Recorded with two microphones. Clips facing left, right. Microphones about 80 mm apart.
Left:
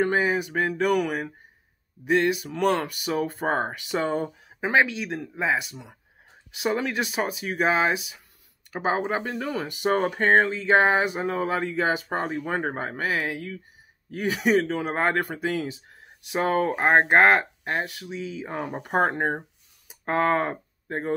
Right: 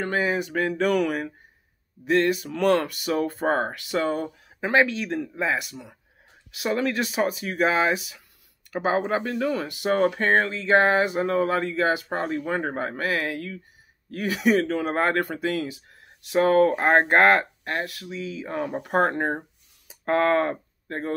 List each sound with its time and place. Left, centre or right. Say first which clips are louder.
0.0 s speech: left 2 dB; left
12.8 s speech: right 1 dB; centre